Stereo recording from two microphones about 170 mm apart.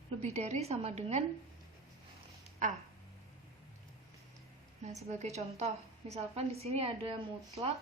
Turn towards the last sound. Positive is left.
turn(degrees=-35)  # may be behind; listen again after turning